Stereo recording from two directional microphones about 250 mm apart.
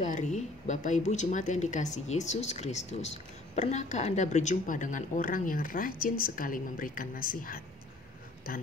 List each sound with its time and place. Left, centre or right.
0.0 s a man's voice: left